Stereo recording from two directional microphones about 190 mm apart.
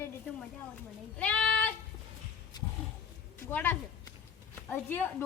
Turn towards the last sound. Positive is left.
turn(degrees=10)  # may be behind; listen again after turning